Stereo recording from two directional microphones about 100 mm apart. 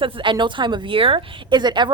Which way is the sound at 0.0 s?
55° right (ahead or behind).